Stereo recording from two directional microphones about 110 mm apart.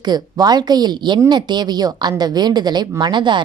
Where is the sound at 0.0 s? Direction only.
35° right (ahead or behind).